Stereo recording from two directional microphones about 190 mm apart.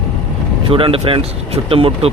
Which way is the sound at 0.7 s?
30° right (ahead or behind).